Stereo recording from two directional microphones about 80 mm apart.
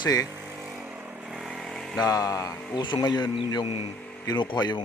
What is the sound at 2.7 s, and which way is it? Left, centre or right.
Speech, left.